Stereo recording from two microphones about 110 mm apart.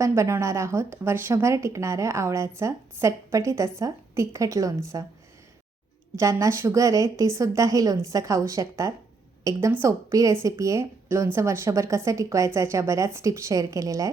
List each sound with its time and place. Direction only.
0.0 s a woman's voice: 25° right (ahead or behind)
6.1 s a woman's voice: 30° right (ahead or behind)